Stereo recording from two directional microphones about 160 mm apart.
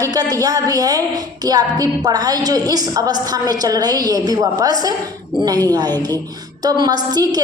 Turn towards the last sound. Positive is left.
turn(degrees=-25)  # may be behind; listen again after turning